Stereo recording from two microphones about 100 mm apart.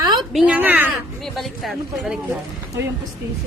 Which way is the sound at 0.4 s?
15° right (ahead or behind).